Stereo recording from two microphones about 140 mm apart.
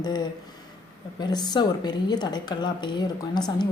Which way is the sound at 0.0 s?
30° left (ahead or behind).